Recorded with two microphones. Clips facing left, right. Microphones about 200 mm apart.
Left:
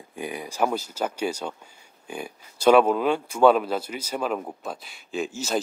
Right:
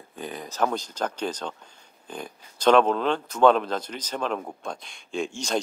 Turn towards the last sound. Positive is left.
turn(degrees=5)  # may be behind; listen again after turning